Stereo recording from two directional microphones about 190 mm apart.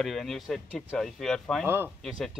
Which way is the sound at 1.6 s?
10° right (ahead or behind).